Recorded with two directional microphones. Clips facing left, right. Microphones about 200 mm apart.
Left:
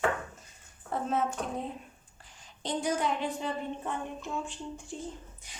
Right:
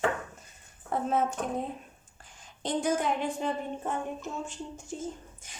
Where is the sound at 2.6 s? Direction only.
50° right (ahead or behind).